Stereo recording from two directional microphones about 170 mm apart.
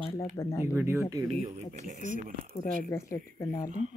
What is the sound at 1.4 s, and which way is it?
Speech, 45° right (ahead or behind).